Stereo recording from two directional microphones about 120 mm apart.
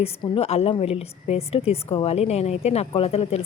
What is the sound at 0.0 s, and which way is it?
A woman's voice, 60° left (ahead or behind).